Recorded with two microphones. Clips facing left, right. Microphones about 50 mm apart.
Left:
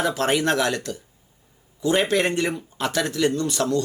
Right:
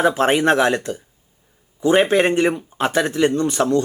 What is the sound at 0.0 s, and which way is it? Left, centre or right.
Speech, right.